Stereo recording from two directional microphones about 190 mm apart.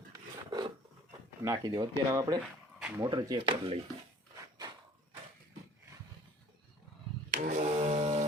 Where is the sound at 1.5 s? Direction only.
20° right (ahead or behind).